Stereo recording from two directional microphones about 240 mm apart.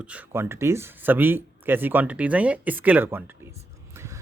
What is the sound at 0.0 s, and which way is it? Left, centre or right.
Speech, centre.